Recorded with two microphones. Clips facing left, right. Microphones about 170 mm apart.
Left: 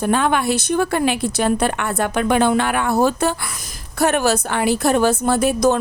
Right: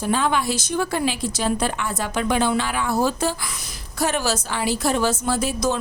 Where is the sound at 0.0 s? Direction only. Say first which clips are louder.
Left 4 dB; 60° left (ahead or behind).